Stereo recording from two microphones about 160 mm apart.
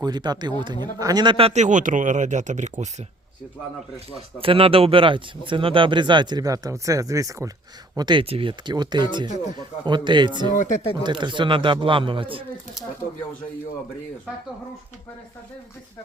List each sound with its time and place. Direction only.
0.0 s speech: 25° right (ahead or behind); by 2.9 s 50° right (ahead or behind)
4.1 s speech: 35° right (ahead or behind)
10.5 s speech: 55° left (ahead or behind)
11.0 s speech: 30° right (ahead or behind)